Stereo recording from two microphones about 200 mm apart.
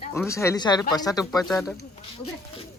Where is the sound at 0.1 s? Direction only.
15° left (ahead or behind).